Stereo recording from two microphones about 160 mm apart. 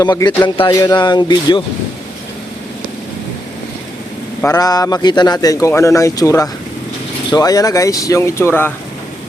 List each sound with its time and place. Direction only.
0.0 s speech: 25° left (ahead or behind)
4.4 s speech: 20° left (ahead or behind)